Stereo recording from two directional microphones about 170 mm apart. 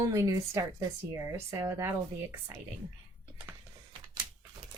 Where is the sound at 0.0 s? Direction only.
15° right (ahead or behind).